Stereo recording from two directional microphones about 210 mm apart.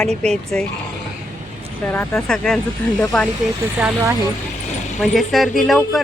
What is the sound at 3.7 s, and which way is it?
Speech, 10° right (ahead or behind).